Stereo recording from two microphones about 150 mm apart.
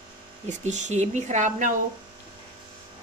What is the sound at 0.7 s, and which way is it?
Speech, 50° right (ahead or behind).